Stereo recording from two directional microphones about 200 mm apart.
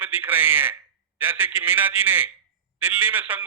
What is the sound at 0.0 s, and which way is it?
A man's voice, 10° right (ahead or behind).